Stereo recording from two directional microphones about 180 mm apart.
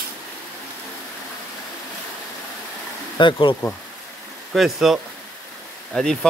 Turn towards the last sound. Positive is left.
turn(degrees=5)  # may be behind; listen again after turning